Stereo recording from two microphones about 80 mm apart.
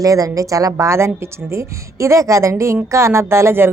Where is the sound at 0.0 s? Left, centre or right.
Right.